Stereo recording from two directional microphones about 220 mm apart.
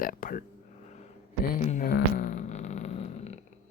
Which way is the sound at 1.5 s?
35° left (ahead or behind).